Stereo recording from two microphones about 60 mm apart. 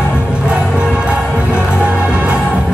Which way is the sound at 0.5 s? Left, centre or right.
Centre.